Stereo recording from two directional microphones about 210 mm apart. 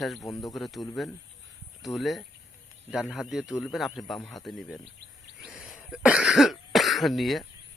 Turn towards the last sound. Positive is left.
turn(degrees=0)  # may be behind; listen again after turning